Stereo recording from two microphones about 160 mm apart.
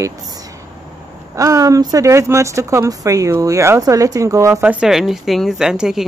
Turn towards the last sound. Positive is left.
turn(degrees=-5)  # may be behind; listen again after turning